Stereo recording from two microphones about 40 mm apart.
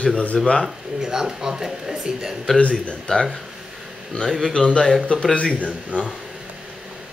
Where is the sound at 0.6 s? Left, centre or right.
Centre.